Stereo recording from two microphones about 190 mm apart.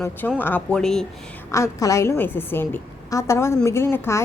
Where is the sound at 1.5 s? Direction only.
15° left (ahead or behind).